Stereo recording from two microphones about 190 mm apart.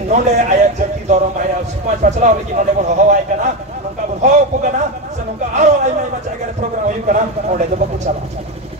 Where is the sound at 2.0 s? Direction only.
40° right (ahead or behind).